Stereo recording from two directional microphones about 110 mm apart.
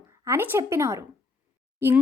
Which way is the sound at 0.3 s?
20° right (ahead or behind).